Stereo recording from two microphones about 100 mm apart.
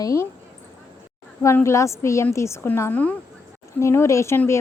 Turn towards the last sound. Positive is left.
turn(degrees=30)  # may be behind; listen again after turning